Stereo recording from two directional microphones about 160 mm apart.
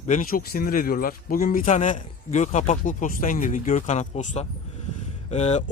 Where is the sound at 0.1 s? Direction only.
60° left (ahead or behind).